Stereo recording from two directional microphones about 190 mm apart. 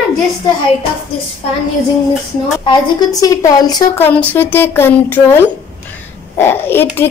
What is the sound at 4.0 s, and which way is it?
A woman's voice, 10° left (ahead or behind).